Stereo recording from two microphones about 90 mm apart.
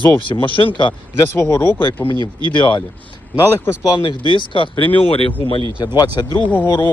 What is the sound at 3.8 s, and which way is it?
Speech, 55° left (ahead or behind).